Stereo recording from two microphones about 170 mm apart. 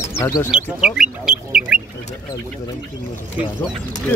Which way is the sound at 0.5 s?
5° right (ahead or behind).